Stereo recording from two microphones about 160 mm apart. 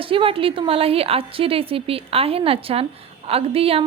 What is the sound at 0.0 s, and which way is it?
A woman's voice, 35° right (ahead or behind).